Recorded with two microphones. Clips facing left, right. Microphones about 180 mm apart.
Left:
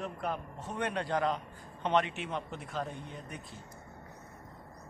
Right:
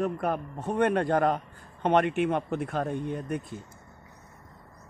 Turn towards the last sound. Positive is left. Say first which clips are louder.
# right 13 dB
turn(degrees=-55)  # may be behind; listen again after turning